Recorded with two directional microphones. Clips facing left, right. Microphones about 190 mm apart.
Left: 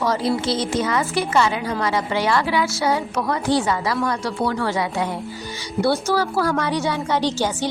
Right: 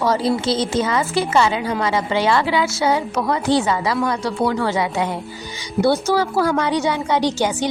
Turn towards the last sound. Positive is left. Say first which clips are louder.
# right 2 dB
turn(degrees=-15)  # may be behind; listen again after turning